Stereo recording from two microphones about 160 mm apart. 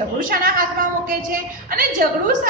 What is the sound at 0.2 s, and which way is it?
A woman's voice, 60° right (ahead or behind).